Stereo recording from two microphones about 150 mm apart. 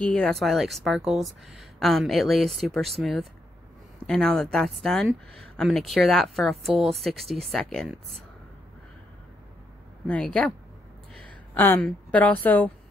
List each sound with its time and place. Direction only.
0.0 s speech: 5° left (ahead or behind)
10.0 s a woman's voice: 5° left (ahead or behind)